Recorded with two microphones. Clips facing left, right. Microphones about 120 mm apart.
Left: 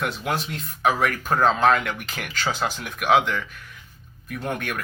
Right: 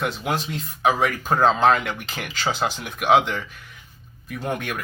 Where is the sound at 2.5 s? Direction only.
Centre (ahead or behind).